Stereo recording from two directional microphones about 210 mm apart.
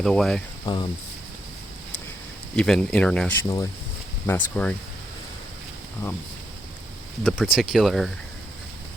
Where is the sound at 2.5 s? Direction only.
5° left (ahead or behind).